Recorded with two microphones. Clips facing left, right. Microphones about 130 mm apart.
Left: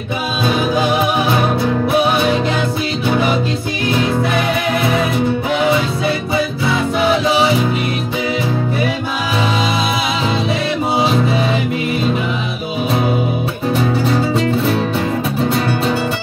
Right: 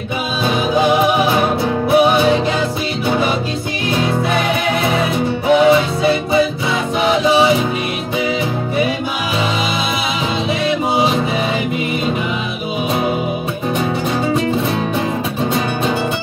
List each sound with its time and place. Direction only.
1.3 s music: 25° right (ahead or behind)
5.6 s music: 25° right (ahead or behind)